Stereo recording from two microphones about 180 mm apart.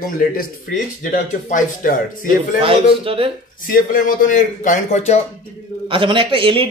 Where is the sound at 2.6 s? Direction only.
30° right (ahead or behind).